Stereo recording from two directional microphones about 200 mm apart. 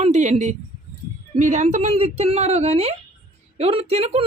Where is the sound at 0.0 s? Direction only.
35° right (ahead or behind).